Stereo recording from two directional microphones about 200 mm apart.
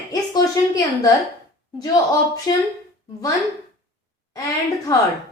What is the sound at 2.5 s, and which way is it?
Speech, 20° left (ahead or behind).